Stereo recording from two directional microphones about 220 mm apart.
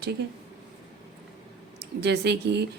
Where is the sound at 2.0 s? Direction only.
50° right (ahead or behind).